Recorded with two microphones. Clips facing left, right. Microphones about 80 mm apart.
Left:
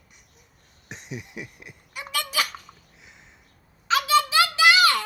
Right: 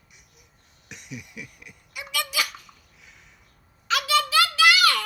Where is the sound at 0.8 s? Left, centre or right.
Left.